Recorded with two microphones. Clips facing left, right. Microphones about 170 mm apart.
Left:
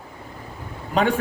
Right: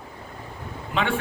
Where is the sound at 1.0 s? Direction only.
40° left (ahead or behind).